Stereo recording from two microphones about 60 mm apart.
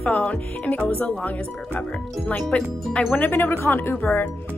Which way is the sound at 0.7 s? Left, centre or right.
Left.